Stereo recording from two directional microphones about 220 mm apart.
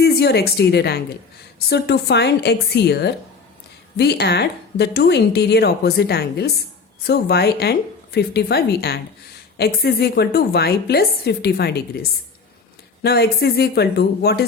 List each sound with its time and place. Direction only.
0.0 s a woman's voice: 45° left (ahead or behind)
13.0 s speech: 45° left (ahead or behind)